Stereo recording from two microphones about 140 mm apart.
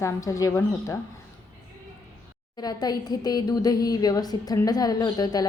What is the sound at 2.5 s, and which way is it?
Speech, 30° left (ahead or behind).